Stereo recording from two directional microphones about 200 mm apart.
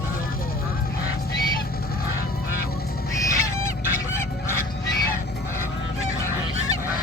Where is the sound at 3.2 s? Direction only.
15° left (ahead or behind).